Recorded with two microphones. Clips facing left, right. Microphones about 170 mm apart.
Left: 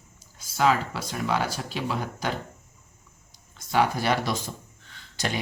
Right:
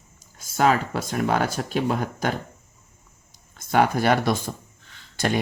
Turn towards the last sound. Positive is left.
turn(degrees=-50)  # may be behind; listen again after turning